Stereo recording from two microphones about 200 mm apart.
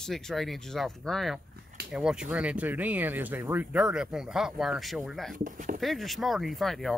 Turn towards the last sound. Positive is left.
turn(degrees=0)  # may be behind; listen again after turning